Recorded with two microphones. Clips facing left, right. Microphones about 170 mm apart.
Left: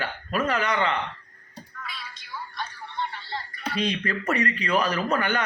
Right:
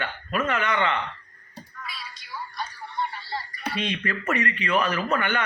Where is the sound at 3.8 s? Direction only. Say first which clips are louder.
Left 3 dB; 35° left (ahead or behind).